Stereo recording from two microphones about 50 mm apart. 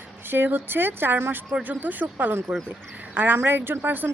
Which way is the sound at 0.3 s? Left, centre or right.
Right.